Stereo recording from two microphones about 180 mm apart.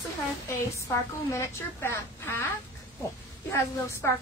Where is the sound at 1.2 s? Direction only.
15° left (ahead or behind).